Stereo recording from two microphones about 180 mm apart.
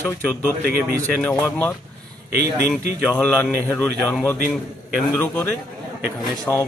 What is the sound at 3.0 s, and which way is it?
A man's voice, 5° left (ahead or behind).